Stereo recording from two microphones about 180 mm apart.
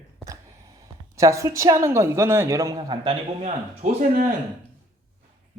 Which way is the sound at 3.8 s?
50° right (ahead or behind).